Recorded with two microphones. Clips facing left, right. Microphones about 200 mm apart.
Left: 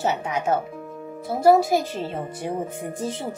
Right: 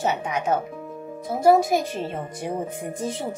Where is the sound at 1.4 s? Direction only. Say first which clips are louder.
Left 1 dB; 20° right (ahead or behind).